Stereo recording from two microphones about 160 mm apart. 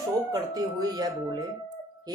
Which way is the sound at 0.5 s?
25° right (ahead or behind).